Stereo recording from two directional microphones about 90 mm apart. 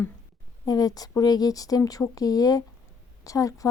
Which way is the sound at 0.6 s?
45° left (ahead or behind).